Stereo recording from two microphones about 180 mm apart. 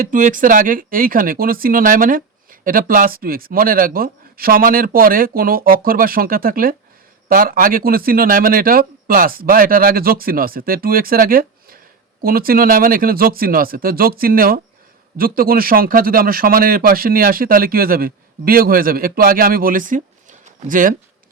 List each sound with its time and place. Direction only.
0.0 s speech: 45° right (ahead or behind)